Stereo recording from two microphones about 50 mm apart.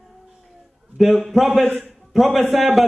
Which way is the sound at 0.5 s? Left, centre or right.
Centre.